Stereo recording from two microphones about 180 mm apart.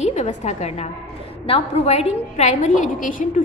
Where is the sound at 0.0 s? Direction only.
40° left (ahead or behind).